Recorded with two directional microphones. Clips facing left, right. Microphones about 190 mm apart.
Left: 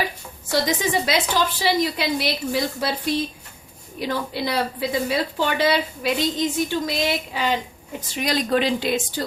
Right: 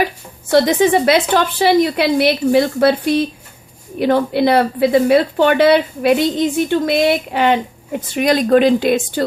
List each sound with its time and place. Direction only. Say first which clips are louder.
0.5 s speech: right 10 dB; 60° right (ahead or behind)